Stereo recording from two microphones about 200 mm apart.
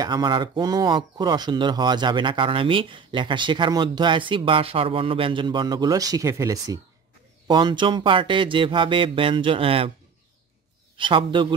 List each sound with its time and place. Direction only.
0.0 s speech: 20° right (ahead or behind)
11.0 s speech: 25° right (ahead or behind)